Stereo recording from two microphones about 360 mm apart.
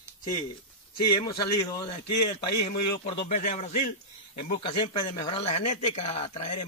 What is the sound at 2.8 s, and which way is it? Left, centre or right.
Speech, centre.